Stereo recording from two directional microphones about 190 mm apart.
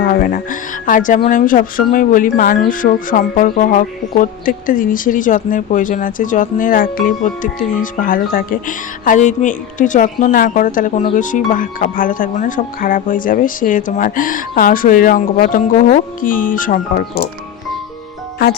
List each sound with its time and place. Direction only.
0.0 s music: 50° left (ahead or behind)
0.9 s speech: 45° left (ahead or behind)